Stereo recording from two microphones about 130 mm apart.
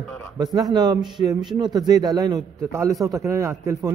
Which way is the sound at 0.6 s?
30° right (ahead or behind).